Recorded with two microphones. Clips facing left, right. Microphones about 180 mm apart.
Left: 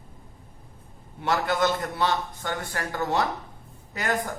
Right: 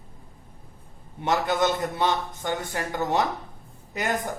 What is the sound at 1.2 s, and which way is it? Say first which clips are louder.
A man's voice: right 1 dB; 20° right (ahead or behind).